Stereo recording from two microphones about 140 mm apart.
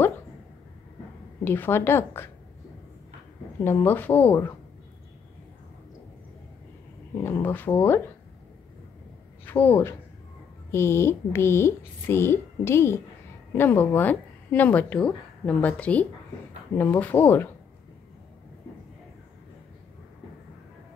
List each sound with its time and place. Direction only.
1.4 s a woman's voice: 15° left (ahead or behind)
3.6 s a woman's voice: 15° left (ahead or behind)
7.2 s a woman's voice: 15° left (ahead or behind)
9.5 s a woman's voice: 15° left (ahead or behind)